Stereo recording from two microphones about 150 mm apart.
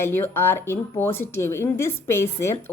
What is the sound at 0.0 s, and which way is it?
A woman's voice, 15° left (ahead or behind).